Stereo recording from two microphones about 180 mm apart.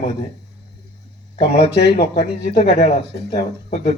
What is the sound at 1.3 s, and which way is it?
Speech, 45° left (ahead or behind).